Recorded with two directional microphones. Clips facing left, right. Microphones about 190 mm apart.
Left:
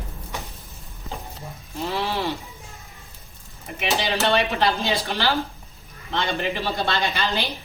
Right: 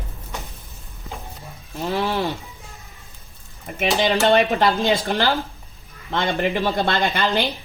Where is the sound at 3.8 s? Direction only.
50° right (ahead or behind).